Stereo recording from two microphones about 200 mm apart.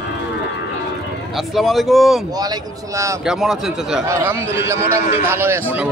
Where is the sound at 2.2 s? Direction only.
20° right (ahead or behind).